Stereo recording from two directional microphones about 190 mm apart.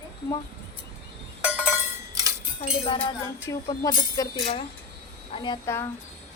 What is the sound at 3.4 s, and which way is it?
Speech, 25° left (ahead or behind).